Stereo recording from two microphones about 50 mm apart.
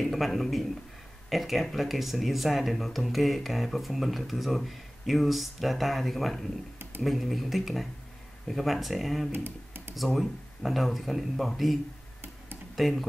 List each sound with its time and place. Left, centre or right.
0.0 s speech: centre
9.3 s computer keyboard: right
9.9 s speech: centre